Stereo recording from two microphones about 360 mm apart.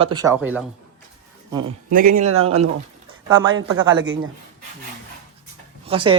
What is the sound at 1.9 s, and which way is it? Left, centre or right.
Speech, right.